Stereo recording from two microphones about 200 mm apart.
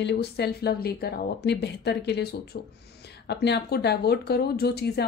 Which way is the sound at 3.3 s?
55° left (ahead or behind).